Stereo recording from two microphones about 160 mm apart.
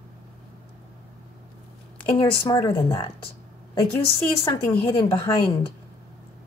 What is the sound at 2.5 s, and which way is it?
Speech, 25° left (ahead or behind).